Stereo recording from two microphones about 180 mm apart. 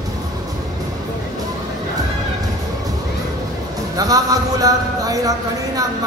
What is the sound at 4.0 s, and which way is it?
Speech, 20° right (ahead or behind).